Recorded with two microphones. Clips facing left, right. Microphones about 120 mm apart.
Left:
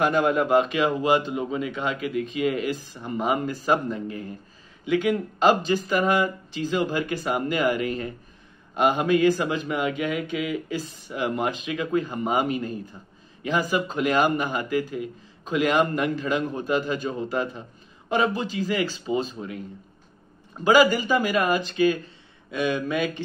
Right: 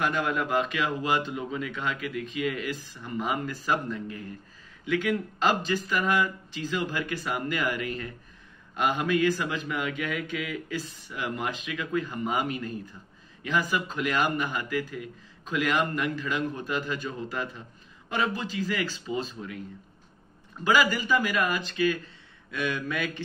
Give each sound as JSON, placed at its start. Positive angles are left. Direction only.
{"t": 0.0, "sound": "speech", "side_deg": 30}
{"t": 11.1, "sound": "speech", "side_deg": 30}
{"t": 20.6, "sound": "speech", "side_deg": 30}